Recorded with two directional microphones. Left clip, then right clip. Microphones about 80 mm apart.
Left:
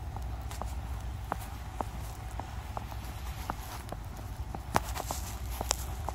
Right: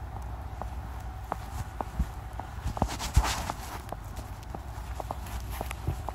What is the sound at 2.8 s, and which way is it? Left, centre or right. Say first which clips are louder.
Horse: right 10 dB; centre.